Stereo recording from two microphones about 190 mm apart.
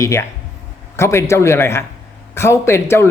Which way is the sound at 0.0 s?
15° left (ahead or behind).